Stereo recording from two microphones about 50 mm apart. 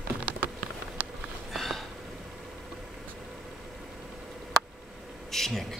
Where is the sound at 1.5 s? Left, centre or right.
Centre.